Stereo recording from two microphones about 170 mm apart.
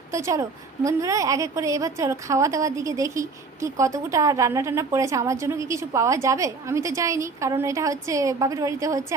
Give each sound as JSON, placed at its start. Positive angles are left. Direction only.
{"t": 0.1, "sound": "a woman's voice", "side_deg": -20}